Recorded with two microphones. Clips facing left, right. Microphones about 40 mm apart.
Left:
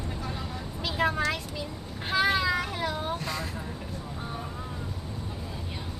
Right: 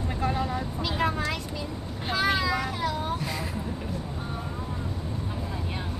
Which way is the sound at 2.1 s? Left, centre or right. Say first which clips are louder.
Left 1 dB; centre.